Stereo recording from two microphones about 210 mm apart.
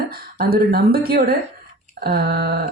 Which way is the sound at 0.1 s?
45° right (ahead or behind).